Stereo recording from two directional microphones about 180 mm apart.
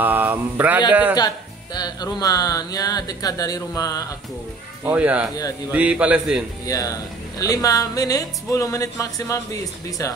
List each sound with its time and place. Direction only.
0.0 s mantra: 10° right (ahead or behind)
1.1 s speech: 20° left (ahead or behind)
4.8 s mantra: 10° right (ahead or behind)
6.6 s speech: 20° left (ahead or behind)